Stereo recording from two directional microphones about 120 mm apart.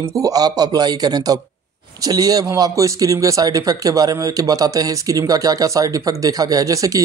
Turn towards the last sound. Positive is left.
turn(degrees=-30)  # may be behind; listen again after turning